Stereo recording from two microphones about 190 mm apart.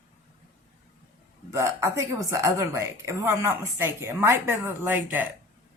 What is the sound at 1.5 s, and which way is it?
Speech, 15° right (ahead or behind).